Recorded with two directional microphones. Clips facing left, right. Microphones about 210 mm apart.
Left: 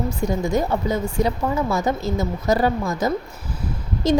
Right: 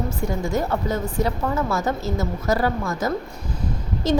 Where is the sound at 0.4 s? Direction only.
15° left (ahead or behind).